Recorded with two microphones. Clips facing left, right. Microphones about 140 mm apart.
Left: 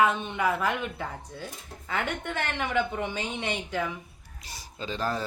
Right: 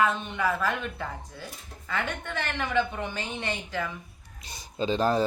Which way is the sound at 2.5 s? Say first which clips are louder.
Right 2 dB; 15° left (ahead or behind).